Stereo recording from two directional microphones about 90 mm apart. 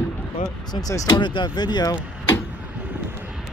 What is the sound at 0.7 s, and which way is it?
Speech, 45° left (ahead or behind).